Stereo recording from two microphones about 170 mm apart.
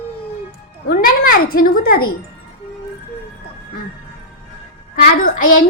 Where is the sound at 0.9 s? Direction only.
60° left (ahead or behind).